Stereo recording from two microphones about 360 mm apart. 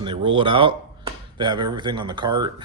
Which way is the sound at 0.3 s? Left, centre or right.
Centre.